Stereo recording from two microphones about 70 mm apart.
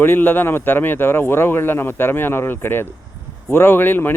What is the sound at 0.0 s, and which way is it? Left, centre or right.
A man's voice, left.